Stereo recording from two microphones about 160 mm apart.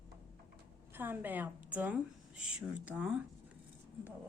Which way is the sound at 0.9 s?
10° right (ahead or behind).